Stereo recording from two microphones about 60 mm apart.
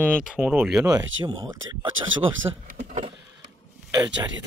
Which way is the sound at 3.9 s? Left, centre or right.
Right.